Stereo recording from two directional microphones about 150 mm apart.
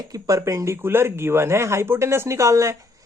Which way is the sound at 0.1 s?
20° right (ahead or behind).